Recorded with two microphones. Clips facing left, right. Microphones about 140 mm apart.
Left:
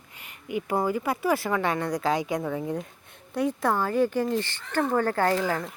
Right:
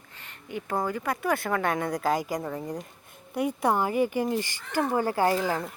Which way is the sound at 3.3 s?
10° right (ahead or behind).